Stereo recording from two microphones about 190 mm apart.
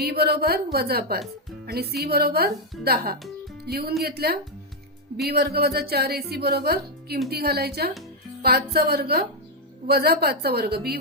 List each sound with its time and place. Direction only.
0.0 s a woman's voice: 55° right (ahead or behind)